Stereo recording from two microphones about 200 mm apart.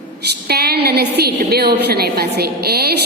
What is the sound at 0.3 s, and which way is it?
A woman's voice, 55° right (ahead or behind).